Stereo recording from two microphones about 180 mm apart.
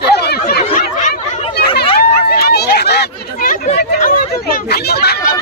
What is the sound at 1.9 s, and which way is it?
Chatter, 60° left (ahead or behind).